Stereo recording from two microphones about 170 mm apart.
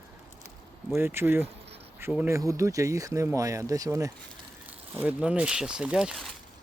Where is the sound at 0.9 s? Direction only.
15° right (ahead or behind).